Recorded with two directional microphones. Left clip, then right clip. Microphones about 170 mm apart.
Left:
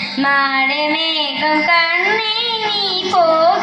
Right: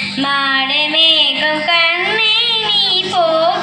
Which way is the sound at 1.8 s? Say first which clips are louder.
Right 2 dB; 25° right (ahead or behind).